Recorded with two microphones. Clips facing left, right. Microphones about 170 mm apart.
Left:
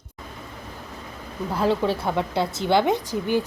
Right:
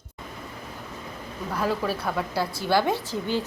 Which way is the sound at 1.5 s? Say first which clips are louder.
Left 4 dB; 25° left (ahead or behind).